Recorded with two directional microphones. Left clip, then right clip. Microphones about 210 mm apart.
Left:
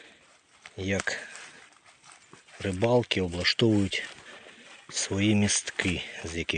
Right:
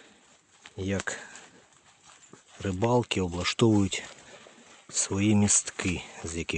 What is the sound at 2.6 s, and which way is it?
Speech, 15° right (ahead or behind).